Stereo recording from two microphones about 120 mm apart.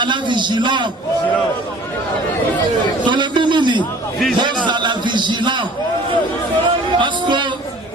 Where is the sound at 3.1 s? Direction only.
40° right (ahead or behind).